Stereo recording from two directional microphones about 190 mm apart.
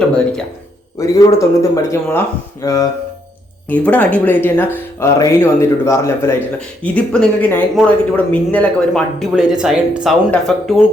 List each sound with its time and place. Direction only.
0.9 s speech: 15° left (ahead or behind); by 10.8 s centre (ahead or behind)